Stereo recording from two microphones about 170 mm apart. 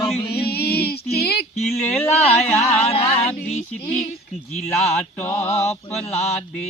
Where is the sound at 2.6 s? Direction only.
40° left (ahead or behind).